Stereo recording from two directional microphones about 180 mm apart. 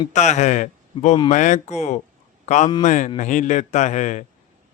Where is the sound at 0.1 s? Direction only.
40° left (ahead or behind).